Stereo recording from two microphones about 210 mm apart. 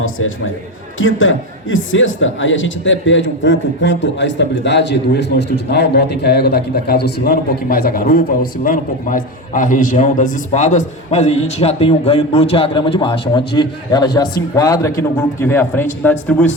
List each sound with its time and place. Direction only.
0.0 s a man's voice: 70° left (ahead or behind); by 16.5 s 5° left (ahead or behind)